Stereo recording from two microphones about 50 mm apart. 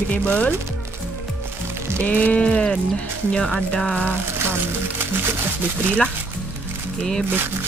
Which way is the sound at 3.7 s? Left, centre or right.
Centre.